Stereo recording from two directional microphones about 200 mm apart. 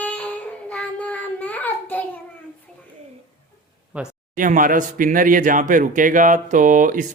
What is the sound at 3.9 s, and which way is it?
Speech, 10° right (ahead or behind).